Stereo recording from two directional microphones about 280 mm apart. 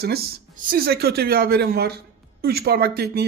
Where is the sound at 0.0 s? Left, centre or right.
Right.